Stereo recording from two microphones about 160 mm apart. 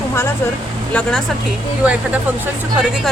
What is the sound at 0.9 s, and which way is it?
Speech, 5° left (ahead or behind).